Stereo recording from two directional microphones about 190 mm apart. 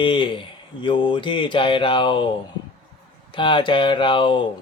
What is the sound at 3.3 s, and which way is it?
Mantra, 25° left (ahead or behind).